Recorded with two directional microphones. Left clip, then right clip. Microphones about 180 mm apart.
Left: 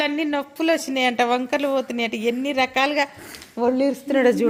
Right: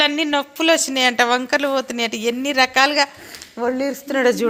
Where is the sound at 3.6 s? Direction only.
20° left (ahead or behind).